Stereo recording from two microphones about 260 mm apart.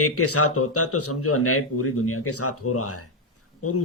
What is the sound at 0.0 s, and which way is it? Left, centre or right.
Speech, left.